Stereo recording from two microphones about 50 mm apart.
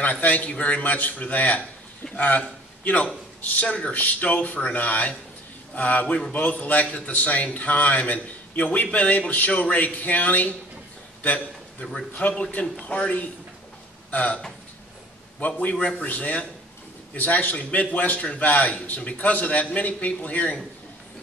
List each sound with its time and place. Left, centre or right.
0.0 s a man's voice: left
15.4 s a man's voice: left